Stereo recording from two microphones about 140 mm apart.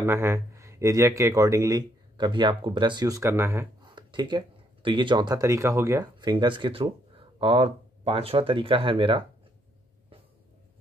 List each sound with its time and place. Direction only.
0.0 s speech: 15° right (ahead or behind)
3.8 s speech: 35° right (ahead or behind)
6.3 s speech: 35° right (ahead or behind)